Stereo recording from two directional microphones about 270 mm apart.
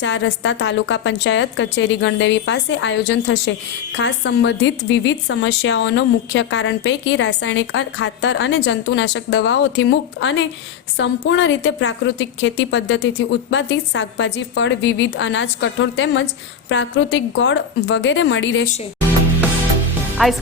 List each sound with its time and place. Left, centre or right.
0.0 s a woman's voice: left
20.2 s speech: centre